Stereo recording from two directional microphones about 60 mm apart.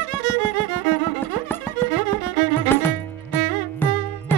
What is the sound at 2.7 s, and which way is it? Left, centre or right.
Music, left.